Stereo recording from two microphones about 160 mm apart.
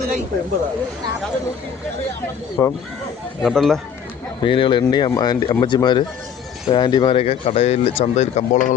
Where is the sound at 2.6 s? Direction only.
20° left (ahead or behind).